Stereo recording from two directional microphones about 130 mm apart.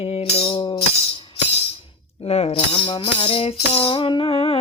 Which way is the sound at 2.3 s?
50° left (ahead or behind).